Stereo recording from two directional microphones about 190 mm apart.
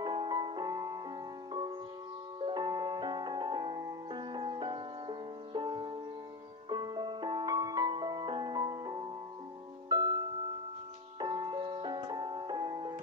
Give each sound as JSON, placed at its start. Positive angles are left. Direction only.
{"t": 0.0, "sound": "music", "side_deg": -25}
{"t": 2.4, "sound": "music", "side_deg": -25}